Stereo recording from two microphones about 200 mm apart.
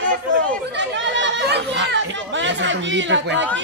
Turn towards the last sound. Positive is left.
turn(degrees=-65)  # may be behind; listen again after turning